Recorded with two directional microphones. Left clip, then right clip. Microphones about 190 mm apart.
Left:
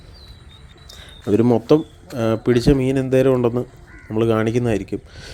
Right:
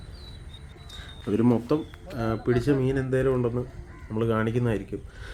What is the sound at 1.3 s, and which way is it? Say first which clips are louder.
Speech: left 9 dB; 35° left (ahead or behind).